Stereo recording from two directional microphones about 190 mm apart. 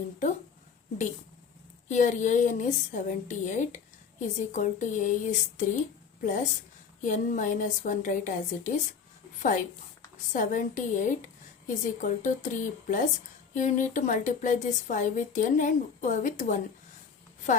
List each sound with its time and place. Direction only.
1.9 s a woman's voice: 40° left (ahead or behind)